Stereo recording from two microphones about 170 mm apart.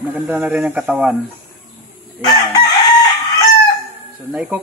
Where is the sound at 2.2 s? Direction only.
25° left (ahead or behind).